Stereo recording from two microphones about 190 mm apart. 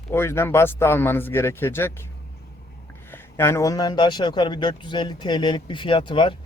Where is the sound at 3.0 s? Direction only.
10° left (ahead or behind).